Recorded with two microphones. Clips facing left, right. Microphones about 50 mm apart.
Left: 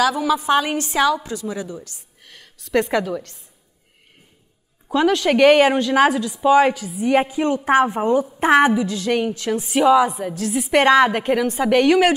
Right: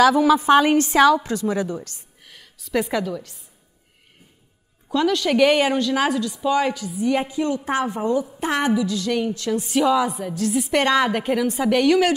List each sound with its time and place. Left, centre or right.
0.0 s a woman's voice: right
2.2 s a sound: centre
2.9 s a woman's voice: centre
4.8 s a woman's voice: left
6.9 s a woman's voice: left
9.6 s a woman's voice: centre